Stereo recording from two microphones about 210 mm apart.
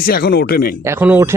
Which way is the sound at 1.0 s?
10° right (ahead or behind).